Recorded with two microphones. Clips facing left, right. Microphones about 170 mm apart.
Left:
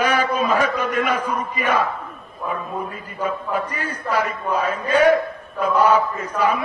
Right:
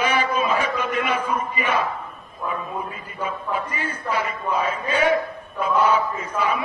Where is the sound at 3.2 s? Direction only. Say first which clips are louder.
Left 3 dB; 40° left (ahead or behind).